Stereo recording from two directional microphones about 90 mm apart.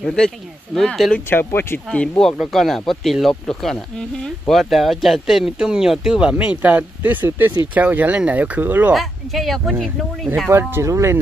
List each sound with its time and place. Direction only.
0.0 s speech: 10° left (ahead or behind)
1.3 s speech: 25° left (ahead or behind)
1.9 s speech: 10° left (ahead or behind)
2.3 s speech: centre (ahead or behind); by 8.9 s 20° right (ahead or behind)
8.9 s speech: centre (ahead or behind)
10.5 s speech: 25° right (ahead or behind)